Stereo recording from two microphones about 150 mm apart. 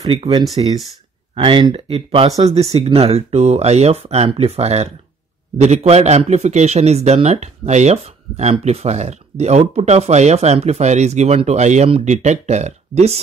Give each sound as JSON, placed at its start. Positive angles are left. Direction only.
{"t": 0.1, "sound": "a man's voice", "side_deg": -40}